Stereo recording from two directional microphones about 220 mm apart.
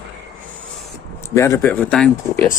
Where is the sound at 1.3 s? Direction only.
15° left (ahead or behind).